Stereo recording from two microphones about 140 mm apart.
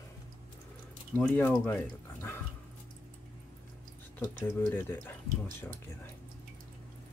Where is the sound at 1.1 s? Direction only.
10° left (ahead or behind).